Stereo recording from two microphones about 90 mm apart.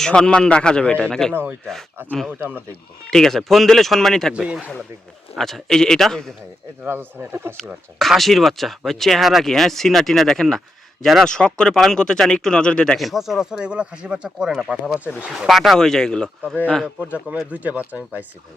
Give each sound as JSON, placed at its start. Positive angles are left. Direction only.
{"t": 0.0, "sound": "speech", "side_deg": 10}
{"t": 1.3, "sound": "speech", "side_deg": -25}
{"t": 3.1, "sound": "speech", "side_deg": 5}
{"t": 5.4, "sound": "speech", "side_deg": 5}
{"t": 6.8, "sound": "speech", "side_deg": -25}
{"t": 7.9, "sound": "speech", "side_deg": 0}
{"t": 13.0, "sound": "speech", "side_deg": 0}
{"t": 16.8, "sound": "speech", "side_deg": -15}